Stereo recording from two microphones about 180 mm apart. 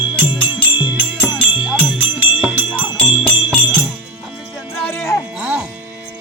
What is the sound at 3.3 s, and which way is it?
Music, 5° left (ahead or behind).